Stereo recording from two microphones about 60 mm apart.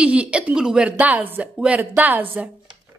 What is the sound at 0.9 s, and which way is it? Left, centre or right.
A woman's voice, right.